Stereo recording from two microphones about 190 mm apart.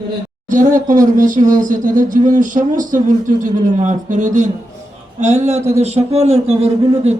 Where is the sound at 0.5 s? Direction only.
45° right (ahead or behind).